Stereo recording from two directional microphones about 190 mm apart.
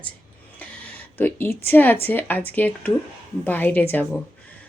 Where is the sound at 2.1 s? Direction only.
10° left (ahead or behind).